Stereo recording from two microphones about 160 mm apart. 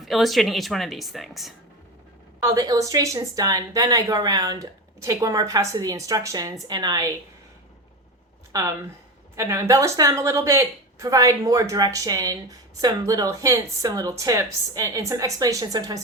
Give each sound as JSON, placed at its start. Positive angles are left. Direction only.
{"t": 0.0, "sound": "a woman's voice", "side_deg": 0}
{"t": 2.4, "sound": "speech", "side_deg": -20}
{"t": 8.5, "sound": "speech", "side_deg": -20}